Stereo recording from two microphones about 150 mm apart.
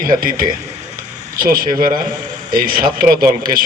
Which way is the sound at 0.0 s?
70° right (ahead or behind).